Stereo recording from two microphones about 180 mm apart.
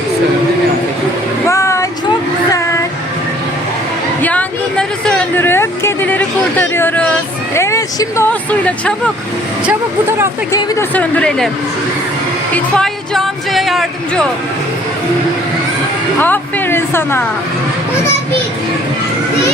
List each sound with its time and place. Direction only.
1.5 s a sound: 15° left (ahead or behind)
4.2 s a sound: 10° left (ahead or behind)
8.3 s speech: 5° left (ahead or behind)
10.5 s speech: 10° left (ahead or behind)
12.7 s music: centre (ahead or behind)
16.2 s speech: 10° left (ahead or behind)